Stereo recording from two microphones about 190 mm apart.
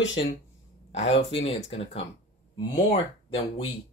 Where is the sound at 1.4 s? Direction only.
30° left (ahead or behind).